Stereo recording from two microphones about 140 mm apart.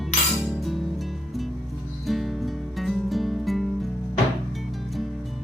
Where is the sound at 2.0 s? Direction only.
Centre (ahead or behind).